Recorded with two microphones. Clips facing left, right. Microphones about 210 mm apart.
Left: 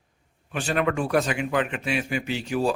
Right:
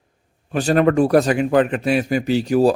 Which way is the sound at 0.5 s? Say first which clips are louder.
Right 9 dB; 40° right (ahead or behind).